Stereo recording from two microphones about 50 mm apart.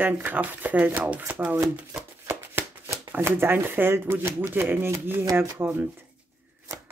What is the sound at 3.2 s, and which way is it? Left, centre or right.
Speech, right.